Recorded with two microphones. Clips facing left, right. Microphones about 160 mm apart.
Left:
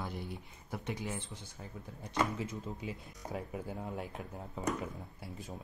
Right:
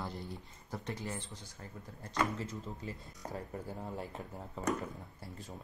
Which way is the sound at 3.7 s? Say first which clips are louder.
Left 1 dB; 5° left (ahead or behind).